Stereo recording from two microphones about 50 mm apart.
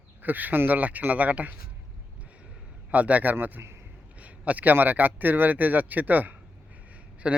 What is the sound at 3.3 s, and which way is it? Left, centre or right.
Speech, right.